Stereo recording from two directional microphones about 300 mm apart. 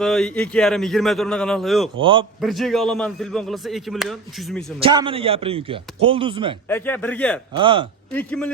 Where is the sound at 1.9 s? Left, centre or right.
Centre.